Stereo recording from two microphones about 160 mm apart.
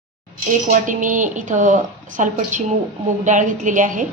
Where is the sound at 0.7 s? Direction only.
55° right (ahead or behind).